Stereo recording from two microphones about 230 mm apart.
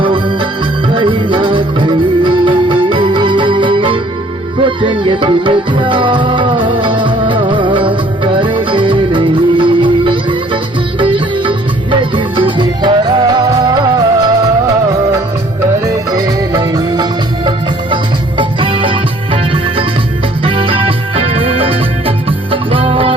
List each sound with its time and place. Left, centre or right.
0.0 s music: right